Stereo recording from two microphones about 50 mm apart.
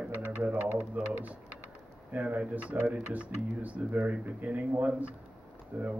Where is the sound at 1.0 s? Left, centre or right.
Right.